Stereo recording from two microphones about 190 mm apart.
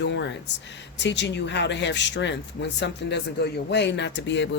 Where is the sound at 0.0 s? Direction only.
70° left (ahead or behind).